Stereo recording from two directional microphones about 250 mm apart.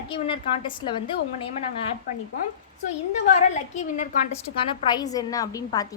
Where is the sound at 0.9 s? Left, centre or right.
Centre.